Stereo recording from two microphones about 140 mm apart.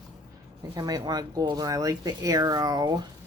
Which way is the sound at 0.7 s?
25° right (ahead or behind).